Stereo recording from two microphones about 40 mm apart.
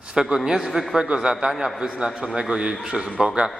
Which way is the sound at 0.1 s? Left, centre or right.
Centre.